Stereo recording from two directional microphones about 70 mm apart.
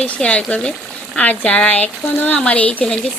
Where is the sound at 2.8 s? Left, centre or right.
Centre.